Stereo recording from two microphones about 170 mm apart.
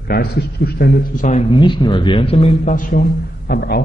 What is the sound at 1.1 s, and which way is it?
Speech, 45° left (ahead or behind).